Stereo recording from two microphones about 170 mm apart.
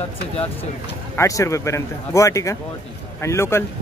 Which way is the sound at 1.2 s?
20° left (ahead or behind).